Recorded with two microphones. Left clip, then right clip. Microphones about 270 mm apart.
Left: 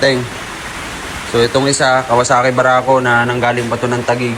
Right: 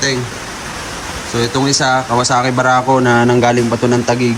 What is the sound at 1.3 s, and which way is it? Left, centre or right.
Speech, centre.